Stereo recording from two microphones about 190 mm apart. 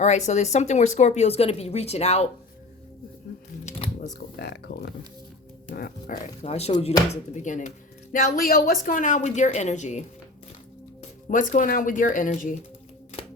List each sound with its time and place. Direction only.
0.0 s speech: 35° left (ahead or behind)
3.7 s a sound: 35° left (ahead or behind)
4.4 s speech: 60° left (ahead or behind)
6.4 s speech: 35° left (ahead or behind)
6.7 s speech: 20° left (ahead or behind)
7.1 s speech: 40° left (ahead or behind)
11.3 s speech: 45° left (ahead or behind)